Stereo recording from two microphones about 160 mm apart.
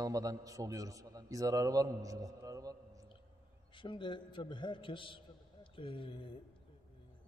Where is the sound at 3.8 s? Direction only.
30° left (ahead or behind).